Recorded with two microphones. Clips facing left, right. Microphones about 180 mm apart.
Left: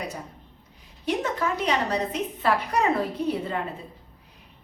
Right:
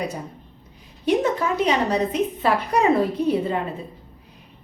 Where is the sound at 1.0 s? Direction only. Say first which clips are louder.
Right 6 dB; 15° right (ahead or behind).